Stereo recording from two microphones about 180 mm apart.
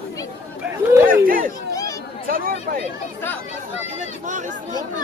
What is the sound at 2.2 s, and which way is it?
Chatter, 50° right (ahead or behind).